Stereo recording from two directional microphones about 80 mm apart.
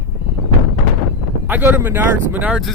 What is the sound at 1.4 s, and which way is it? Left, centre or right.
Speech, right.